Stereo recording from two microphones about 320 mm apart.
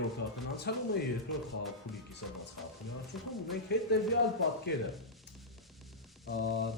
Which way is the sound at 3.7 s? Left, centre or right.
Left.